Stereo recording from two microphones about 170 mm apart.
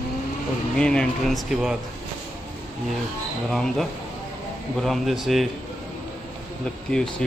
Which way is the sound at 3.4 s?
Centre (ahead or behind).